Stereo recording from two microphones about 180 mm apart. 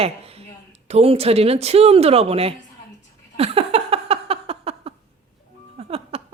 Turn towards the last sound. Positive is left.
turn(degrees=-35)  # may be behind; listen again after turning